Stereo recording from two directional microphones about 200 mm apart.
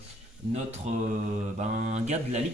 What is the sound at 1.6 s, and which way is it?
Speech, 35° right (ahead or behind).